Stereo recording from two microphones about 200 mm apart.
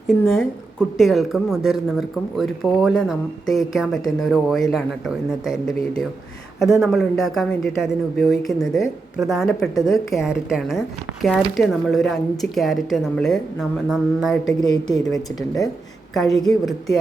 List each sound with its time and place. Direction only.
0.1 s speech: centre (ahead or behind)
15.4 s speech: 15° left (ahead or behind)
16.1 s speech: centre (ahead or behind)